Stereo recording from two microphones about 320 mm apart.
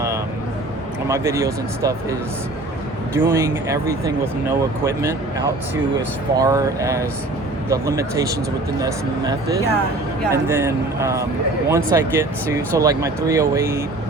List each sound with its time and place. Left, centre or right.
1.0 s speech: centre
3.2 s speech: centre